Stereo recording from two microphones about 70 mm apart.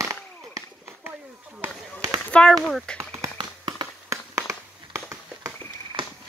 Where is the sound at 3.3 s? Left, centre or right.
Right.